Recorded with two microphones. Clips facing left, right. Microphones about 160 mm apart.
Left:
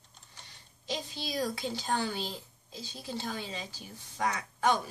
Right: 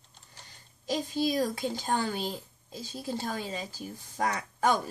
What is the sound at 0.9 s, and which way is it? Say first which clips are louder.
Speech: right 8 dB; 45° right (ahead or behind).